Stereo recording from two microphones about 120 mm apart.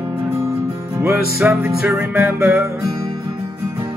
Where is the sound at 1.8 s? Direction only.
5° right (ahead or behind).